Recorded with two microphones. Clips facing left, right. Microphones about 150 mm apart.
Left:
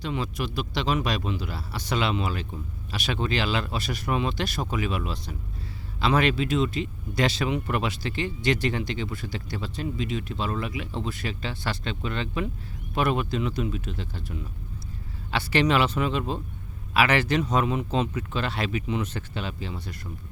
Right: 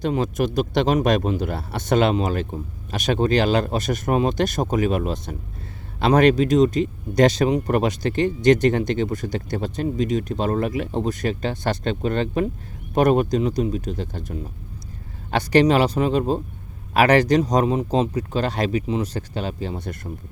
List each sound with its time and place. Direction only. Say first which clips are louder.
0.0 s speech: right 8 dB; 45° right (ahead or behind)